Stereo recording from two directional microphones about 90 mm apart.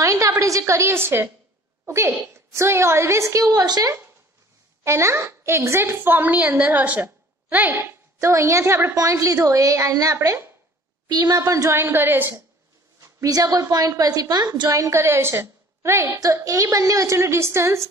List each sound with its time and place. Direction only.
0.0 s a woman's voice: 35° right (ahead or behind)
4.8 s a woman's voice: 30° right (ahead or behind)
11.1 s a woman's voice: 45° right (ahead or behind); by 12.4 s 25° right (ahead or behind)
13.0 s a woman's voice: 40° right (ahead or behind)